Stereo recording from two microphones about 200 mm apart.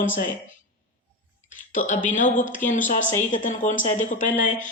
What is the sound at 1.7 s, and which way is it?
Speech, 40° left (ahead or behind).